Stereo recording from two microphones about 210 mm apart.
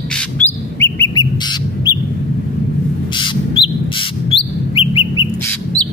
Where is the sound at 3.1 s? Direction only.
20° left (ahead or behind).